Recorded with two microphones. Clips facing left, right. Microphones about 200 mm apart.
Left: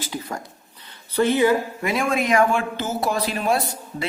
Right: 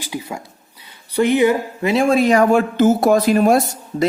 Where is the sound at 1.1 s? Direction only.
15° right (ahead or behind).